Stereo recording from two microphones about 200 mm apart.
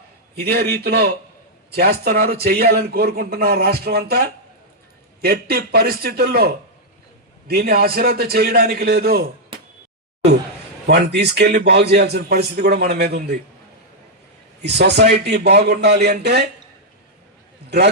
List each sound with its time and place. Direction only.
0.3 s a man's voice: 50° right (ahead or behind)
10.8 s a man's voice: 55° right (ahead or behind)
14.6 s a man's voice: 55° right (ahead or behind)